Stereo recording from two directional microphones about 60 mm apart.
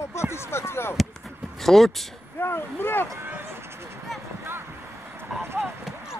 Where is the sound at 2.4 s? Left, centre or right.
Left.